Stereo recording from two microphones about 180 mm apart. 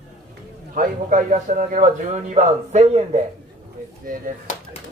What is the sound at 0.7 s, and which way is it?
A man's voice, 45° right (ahead or behind).